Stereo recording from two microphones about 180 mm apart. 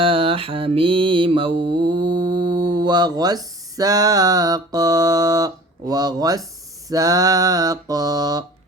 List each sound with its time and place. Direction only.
0.0 s mantra: 30° right (ahead or behind)